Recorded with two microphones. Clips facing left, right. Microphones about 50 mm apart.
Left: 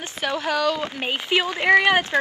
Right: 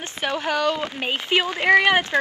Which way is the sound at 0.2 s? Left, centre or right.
Centre.